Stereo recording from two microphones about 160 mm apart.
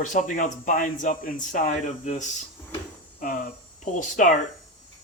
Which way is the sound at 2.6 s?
15° left (ahead or behind).